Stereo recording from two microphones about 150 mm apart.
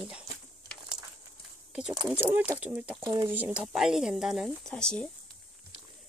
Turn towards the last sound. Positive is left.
turn(degrees=5)  # may be behind; listen again after turning